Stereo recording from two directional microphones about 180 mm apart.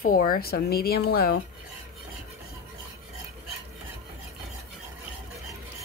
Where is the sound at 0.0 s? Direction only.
55° left (ahead or behind).